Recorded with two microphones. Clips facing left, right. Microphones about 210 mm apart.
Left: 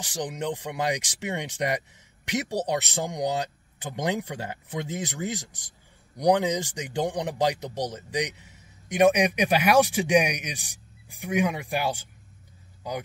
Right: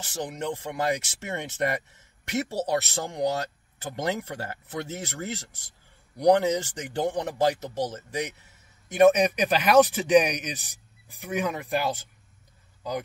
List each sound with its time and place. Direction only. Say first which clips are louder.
0.0 s speech: left 1 dB; 15° left (ahead or behind)